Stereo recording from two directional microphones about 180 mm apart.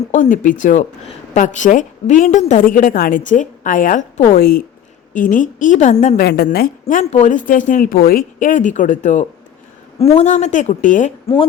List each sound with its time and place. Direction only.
0.1 s a woman's voice: 45° left (ahead or behind)